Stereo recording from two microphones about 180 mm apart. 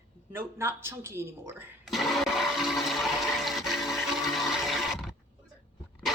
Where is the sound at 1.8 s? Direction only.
Centre (ahead or behind).